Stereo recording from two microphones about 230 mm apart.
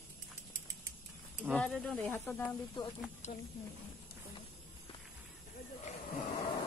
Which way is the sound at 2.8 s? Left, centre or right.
Left.